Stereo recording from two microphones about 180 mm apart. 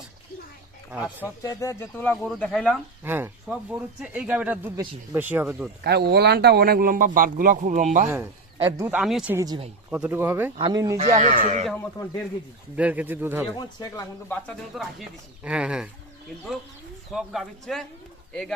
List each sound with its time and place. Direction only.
0.9 s speech: 10° right (ahead or behind)
1.4 s speech: 20° left (ahead or behind)
3.0 s speech: 10° right (ahead or behind)
5.8 s speech: 65° right (ahead or behind); by 8.1 s 40° right (ahead or behind)
8.6 s speech: 10° right (ahead or behind)
9.3 s speech: 20° right (ahead or behind)
10.6 s speech: 20° right (ahead or behind)
10.9 s speech: 35° right (ahead or behind)
12.0 s a man's voice: 20° left (ahead or behind)
12.7 s speech: 10° right (ahead or behind)
13.5 s a man's voice: 20° left (ahead or behind)
14.4 s speech: centre (ahead or behind)
17.1 s speech: centre (ahead or behind)